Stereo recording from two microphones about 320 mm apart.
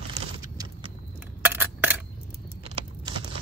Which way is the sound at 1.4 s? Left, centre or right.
Centre.